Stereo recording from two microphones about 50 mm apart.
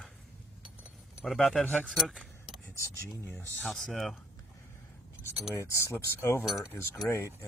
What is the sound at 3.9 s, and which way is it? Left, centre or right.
Speech, centre.